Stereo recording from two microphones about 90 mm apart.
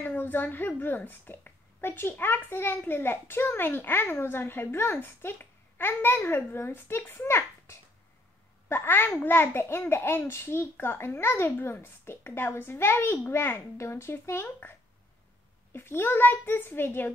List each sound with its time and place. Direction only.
0.0 s a woman's voice: 20° left (ahead or behind)